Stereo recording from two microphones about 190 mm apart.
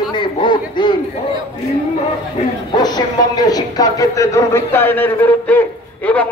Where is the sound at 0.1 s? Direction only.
25° left (ahead or behind).